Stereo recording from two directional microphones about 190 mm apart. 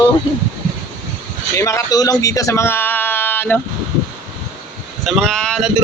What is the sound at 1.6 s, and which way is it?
Speech, 15° left (ahead or behind).